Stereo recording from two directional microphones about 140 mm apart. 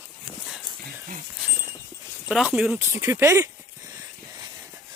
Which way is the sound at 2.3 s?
5° right (ahead or behind).